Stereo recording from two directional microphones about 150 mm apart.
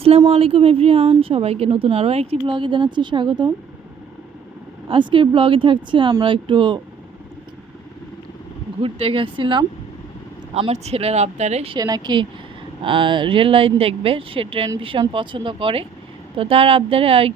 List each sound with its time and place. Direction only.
0.0 s speech: 40° right (ahead or behind)
4.9 s speech: 35° right (ahead or behind)
8.8 s speech: 40° right (ahead or behind)
10.5 s speech: 45° right (ahead or behind)
11.8 s speech: 25° right (ahead or behind)